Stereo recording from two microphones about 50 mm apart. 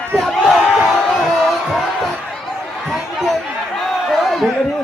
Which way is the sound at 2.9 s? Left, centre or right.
Centre.